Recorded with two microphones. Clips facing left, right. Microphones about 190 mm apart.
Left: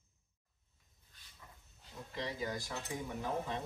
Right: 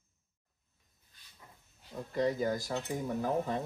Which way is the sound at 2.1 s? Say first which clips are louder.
Right 9 dB; 45° right (ahead or behind).